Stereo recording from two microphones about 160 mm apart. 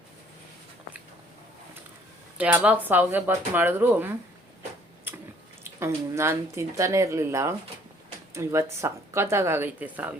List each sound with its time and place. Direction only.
2.4 s speech: 10° right (ahead or behind)
5.6 s speech: 15° right (ahead or behind)